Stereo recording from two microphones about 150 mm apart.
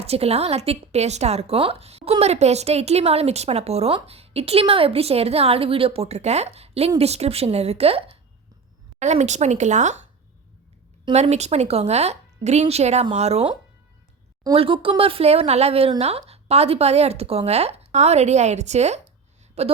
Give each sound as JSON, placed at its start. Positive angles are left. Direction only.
{"t": 0.0, "sound": "a woman's voice", "side_deg": -40}
{"t": 9.0, "sound": "a woman's voice", "side_deg": -50}
{"t": 11.1, "sound": "a woman's voice", "side_deg": -45}